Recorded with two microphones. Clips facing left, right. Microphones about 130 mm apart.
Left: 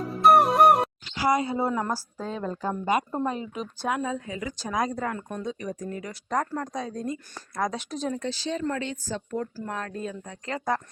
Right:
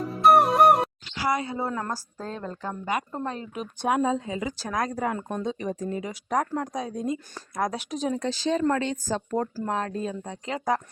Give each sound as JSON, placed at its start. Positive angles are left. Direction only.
{"t": 0.0, "sound": "music", "side_deg": 0}
{"t": 1.2, "sound": "a woman's voice", "side_deg": 20}
{"t": 3.8, "sound": "speech", "side_deg": -25}
{"t": 4.5, "sound": "a woman's voice", "side_deg": 0}
{"t": 5.1, "sound": "speech", "side_deg": -25}
{"t": 6.2, "sound": "speech", "side_deg": -10}
{"t": 8.2, "sound": "speech", "side_deg": -40}
{"t": 9.6, "sound": "speech", "side_deg": -25}
{"t": 10.4, "sound": "speech", "side_deg": -15}